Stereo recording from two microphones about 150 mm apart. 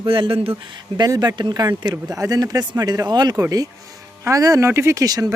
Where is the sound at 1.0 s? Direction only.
25° right (ahead or behind).